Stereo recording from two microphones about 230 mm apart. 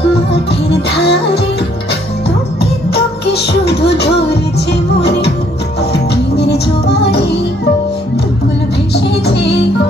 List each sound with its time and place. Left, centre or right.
0.5 s music: left
2.6 s music: left
8.9 s music: left